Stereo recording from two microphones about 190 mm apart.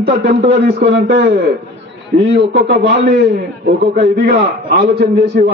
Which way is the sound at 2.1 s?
55° right (ahead or behind).